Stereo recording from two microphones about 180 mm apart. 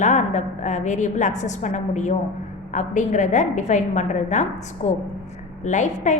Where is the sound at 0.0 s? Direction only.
40° left (ahead or behind).